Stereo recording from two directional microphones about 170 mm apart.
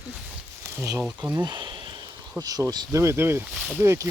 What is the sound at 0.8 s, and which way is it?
Speech, 10° right (ahead or behind).